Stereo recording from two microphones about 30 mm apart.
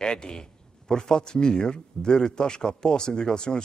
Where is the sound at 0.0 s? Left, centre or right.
Left.